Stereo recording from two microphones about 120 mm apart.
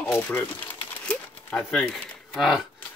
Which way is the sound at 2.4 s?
5° right (ahead or behind).